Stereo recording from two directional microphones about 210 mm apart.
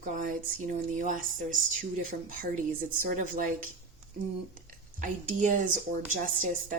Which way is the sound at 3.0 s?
40° right (ahead or behind).